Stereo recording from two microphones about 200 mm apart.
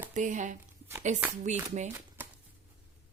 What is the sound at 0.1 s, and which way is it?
Speech, 40° right (ahead or behind).